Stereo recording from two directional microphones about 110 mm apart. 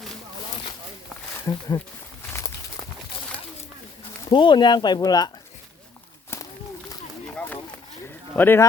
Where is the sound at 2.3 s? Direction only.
35° left (ahead or behind).